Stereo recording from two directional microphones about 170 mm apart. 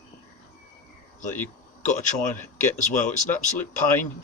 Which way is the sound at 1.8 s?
45° left (ahead or behind).